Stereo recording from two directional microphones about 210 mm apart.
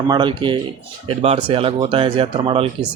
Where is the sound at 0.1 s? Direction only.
20° right (ahead or behind).